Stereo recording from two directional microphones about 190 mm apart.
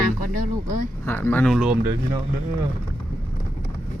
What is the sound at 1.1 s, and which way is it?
Speech, 10° left (ahead or behind).